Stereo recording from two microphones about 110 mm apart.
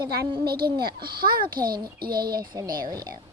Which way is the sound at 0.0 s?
45° right (ahead or behind).